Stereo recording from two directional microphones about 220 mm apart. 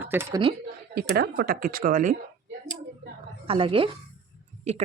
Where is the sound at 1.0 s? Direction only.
50° right (ahead or behind).